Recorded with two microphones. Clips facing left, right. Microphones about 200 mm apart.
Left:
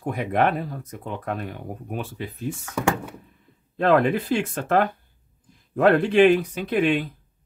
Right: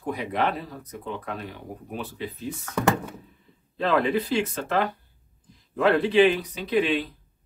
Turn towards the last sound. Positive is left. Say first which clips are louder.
# left 2 dB
turn(degrees=50)  # may be behind; listen again after turning